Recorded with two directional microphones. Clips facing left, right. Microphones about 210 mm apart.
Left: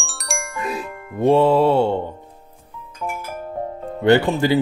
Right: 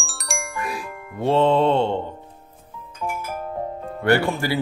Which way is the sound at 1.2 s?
10° left (ahead or behind).